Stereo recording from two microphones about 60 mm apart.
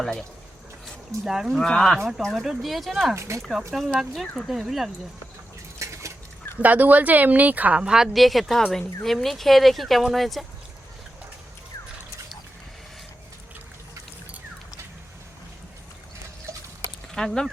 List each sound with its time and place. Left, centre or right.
0.0 s speech: centre
1.2 s speech: centre
1.5 s speech: centre
3.2 s speech: right
3.7 s speech: centre
5.8 s a sound: right
6.6 s speech: right
7.8 s speech: centre
17.1 s speech: centre